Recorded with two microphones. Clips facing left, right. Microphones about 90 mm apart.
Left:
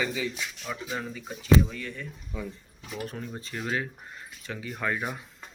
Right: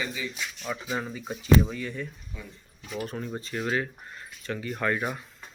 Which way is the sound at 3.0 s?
Centre (ahead or behind).